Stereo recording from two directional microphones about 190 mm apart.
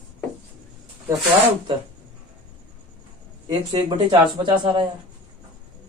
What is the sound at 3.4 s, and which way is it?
Speech, 25° right (ahead or behind).